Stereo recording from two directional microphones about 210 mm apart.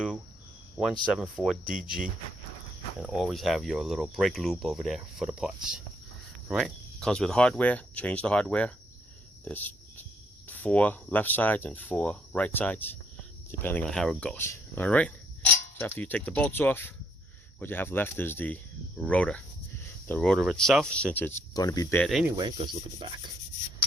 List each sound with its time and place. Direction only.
1.1 s speech: 5° right (ahead or behind)
3.0 s speech: centre (ahead or behind); by 21.9 s 15° left (ahead or behind)
21.9 s speech: centre (ahead or behind)
22.4 s speech: 20° right (ahead or behind)